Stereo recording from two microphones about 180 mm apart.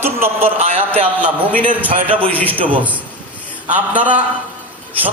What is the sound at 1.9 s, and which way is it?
Speech, 30° right (ahead or behind).